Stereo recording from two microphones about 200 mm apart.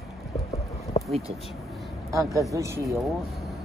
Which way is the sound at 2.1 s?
15° right (ahead or behind).